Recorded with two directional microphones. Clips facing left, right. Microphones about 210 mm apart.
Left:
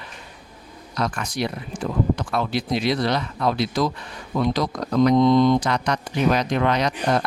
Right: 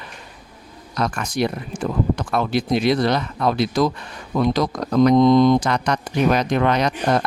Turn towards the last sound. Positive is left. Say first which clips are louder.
# right 2 dB
turn(degrees=-50)  # may be behind; listen again after turning